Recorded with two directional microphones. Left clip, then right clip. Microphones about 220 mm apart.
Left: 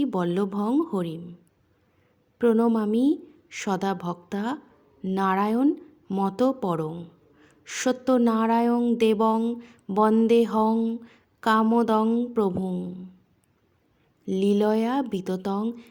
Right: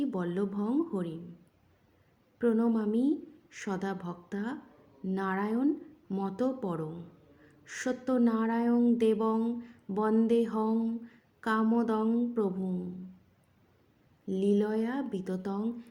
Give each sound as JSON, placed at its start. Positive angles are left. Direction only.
{"t": 0.0, "sound": "a woman's voice", "side_deg": 40}
{"t": 2.4, "sound": "a woman's voice", "side_deg": 40}
{"t": 14.3, "sound": "a woman's voice", "side_deg": 40}